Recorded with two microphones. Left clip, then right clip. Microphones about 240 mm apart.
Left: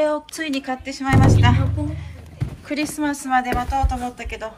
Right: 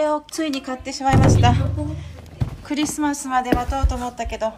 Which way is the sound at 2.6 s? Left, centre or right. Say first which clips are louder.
Right 1 dB; centre.